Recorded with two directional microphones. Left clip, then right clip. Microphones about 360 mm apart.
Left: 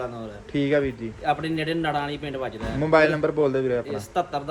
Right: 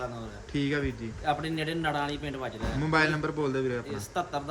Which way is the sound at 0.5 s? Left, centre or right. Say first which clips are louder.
Left 8 dB; centre.